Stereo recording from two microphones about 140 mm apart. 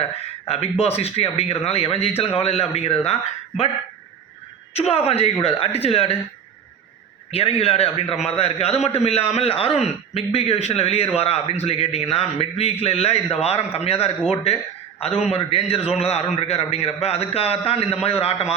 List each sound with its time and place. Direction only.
0.4 s a man's voice: 45° left (ahead or behind)
4.9 s a man's voice: 45° left (ahead or behind)
7.3 s a man's voice: 45° left (ahead or behind)